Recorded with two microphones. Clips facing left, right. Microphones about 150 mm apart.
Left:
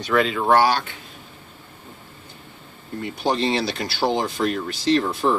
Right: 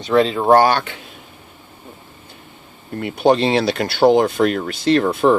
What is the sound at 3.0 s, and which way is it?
Speech, 65° right (ahead or behind).